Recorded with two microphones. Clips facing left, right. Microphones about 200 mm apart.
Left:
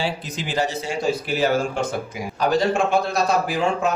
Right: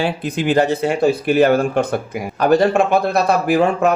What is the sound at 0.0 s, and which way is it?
A man's voice, 55° right (ahead or behind).